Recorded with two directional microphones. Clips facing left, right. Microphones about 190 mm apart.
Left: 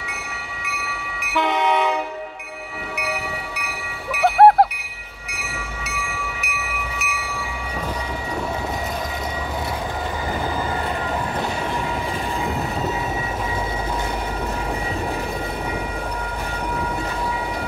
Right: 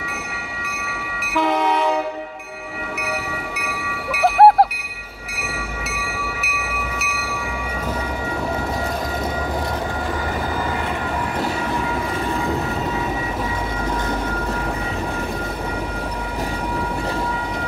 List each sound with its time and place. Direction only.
1.3 s train: centre (ahead or behind)
4.1 s music: centre (ahead or behind)